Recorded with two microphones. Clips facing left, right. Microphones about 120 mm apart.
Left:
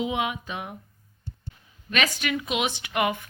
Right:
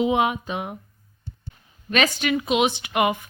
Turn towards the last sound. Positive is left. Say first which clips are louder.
# right 5 dB
turn(degrees=-20)  # may be behind; listen again after turning